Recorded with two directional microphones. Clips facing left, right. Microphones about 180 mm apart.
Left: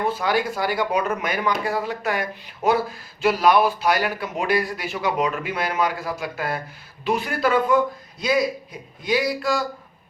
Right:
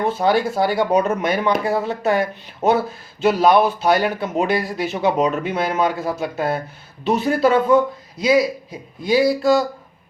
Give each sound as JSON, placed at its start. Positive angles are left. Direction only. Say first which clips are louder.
{"t": 0.0, "sound": "speech", "louder": "right 4 dB", "side_deg": -25}